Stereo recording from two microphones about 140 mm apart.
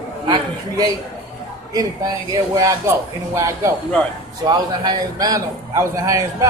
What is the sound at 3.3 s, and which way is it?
A man's voice, 20° right (ahead or behind).